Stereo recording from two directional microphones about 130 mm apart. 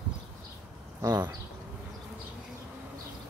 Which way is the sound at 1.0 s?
30° right (ahead or behind).